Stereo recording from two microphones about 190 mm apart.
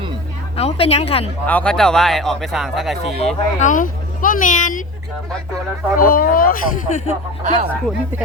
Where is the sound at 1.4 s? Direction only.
5° left (ahead or behind).